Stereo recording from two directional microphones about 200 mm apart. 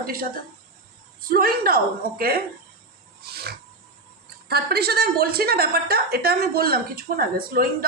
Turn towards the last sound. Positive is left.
turn(degrees=-45)  # may be behind; listen again after turning